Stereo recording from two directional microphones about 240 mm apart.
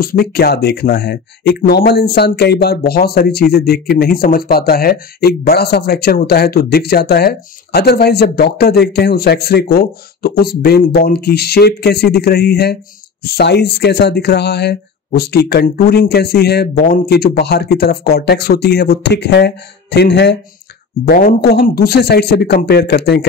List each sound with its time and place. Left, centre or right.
0.0 s speech: left